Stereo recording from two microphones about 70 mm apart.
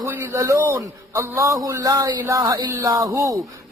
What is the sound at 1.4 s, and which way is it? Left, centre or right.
Speech, right.